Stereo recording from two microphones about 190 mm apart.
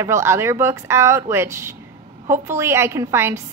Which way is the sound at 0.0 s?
15° right (ahead or behind).